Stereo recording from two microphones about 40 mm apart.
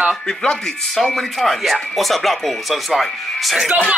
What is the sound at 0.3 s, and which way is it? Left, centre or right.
Speech, centre.